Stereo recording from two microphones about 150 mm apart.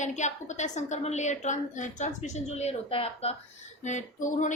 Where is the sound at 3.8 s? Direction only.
55° left (ahead or behind).